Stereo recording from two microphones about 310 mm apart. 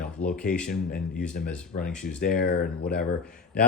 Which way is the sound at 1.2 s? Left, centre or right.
Centre.